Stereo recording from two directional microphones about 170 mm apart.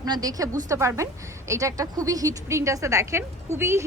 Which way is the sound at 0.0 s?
20° right (ahead or behind).